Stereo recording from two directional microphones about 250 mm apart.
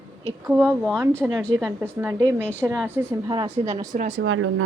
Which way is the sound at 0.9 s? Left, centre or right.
Centre.